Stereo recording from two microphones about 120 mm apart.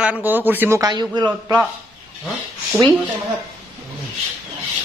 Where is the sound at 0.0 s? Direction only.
10° right (ahead or behind).